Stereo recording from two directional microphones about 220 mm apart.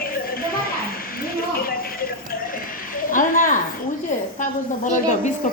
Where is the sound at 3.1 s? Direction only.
35° left (ahead or behind).